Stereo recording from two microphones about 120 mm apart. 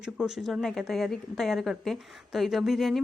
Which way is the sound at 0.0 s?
5° right (ahead or behind).